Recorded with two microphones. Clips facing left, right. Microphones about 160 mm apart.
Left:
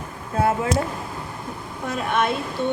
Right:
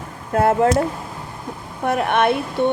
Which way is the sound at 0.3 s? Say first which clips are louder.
Right 6 dB; 55° right (ahead or behind).